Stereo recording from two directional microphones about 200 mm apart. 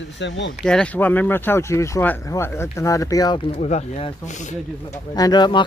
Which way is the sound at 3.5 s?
35° left (ahead or behind).